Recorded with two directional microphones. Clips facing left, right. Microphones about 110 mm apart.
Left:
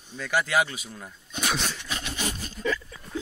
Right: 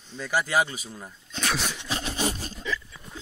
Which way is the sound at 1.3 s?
10° left (ahead or behind).